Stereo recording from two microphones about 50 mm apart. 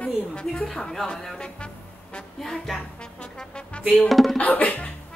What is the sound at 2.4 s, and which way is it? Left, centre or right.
Speech, centre.